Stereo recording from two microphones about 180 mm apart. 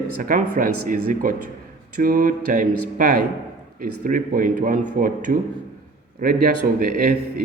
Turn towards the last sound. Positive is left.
turn(degrees=-55)  # may be behind; listen again after turning